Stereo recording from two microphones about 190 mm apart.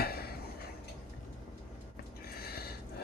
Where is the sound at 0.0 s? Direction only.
55° left (ahead or behind).